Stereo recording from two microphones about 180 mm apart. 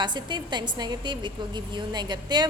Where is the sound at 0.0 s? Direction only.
25° right (ahead or behind).